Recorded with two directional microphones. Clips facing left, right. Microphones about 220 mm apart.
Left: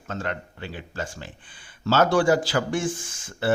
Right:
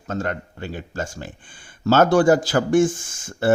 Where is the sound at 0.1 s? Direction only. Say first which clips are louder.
Right 5 dB; 45° right (ahead or behind).